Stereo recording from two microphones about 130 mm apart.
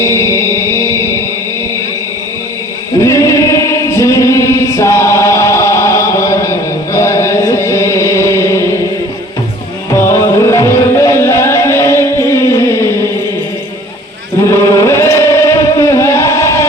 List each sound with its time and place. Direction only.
0.0 s music: 20° left (ahead or behind)
3.0 s singing: 25° left (ahead or behind)
9.9 s music: 20° left (ahead or behind)
14.4 s chant: 25° left (ahead or behind)